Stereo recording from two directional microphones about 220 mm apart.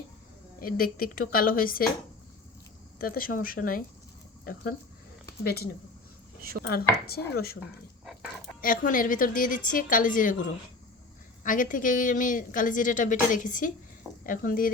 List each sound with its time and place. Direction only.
0.6 s a woman's voice: 40° left (ahead or behind)
3.0 s a woman's voice: 40° left (ahead or behind)
5.4 s speech: 45° left (ahead or behind)
6.5 s speech: 60° right (ahead or behind)
7.1 s speech: 45° left (ahead or behind)
8.6 s a woman's voice: 40° left (ahead or behind)
11.4 s a woman's voice: 35° left (ahead or behind)